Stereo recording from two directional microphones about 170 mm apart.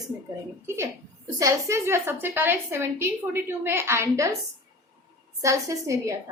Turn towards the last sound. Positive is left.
turn(degrees=-20)  # may be behind; listen again after turning